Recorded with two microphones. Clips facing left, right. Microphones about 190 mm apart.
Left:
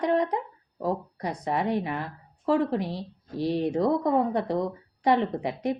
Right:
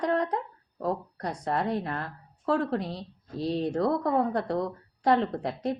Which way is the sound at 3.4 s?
65° left (ahead or behind).